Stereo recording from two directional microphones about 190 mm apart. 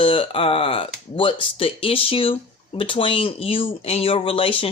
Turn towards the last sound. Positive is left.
turn(degrees=30)  # may be behind; listen again after turning